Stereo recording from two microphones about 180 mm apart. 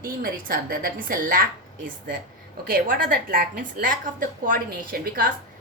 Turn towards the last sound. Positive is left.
turn(degrees=-50)  # may be behind; listen again after turning